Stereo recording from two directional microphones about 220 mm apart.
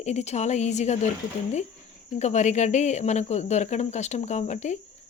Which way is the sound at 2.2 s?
30° left (ahead or behind).